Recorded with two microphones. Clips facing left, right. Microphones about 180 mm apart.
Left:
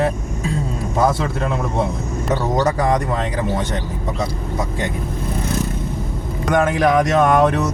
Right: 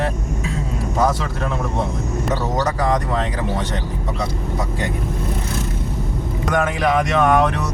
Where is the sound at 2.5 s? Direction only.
20° left (ahead or behind).